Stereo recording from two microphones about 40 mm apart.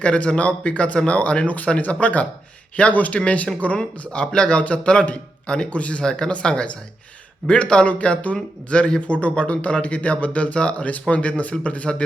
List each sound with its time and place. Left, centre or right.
0.0 s speech: left
1.5 s speech: left
6.1 s speech: centre